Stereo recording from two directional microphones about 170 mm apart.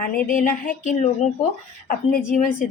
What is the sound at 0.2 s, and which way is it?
A woman's voice, 55° left (ahead or behind).